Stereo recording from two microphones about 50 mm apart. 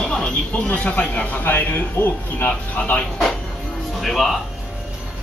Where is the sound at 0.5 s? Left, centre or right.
Left.